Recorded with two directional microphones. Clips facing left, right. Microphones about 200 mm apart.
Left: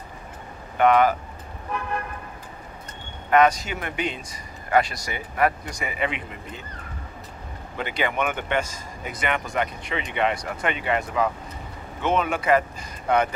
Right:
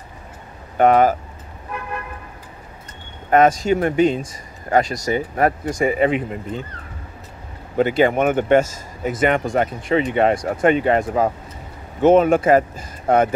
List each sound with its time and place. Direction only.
0.7 s speech: 45° right (ahead or behind)
3.3 s speech: 45° right (ahead or behind)
7.7 s speech: 45° right (ahead or behind)